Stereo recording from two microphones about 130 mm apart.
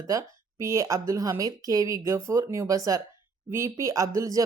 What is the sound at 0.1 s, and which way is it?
Speech, 25° right (ahead or behind).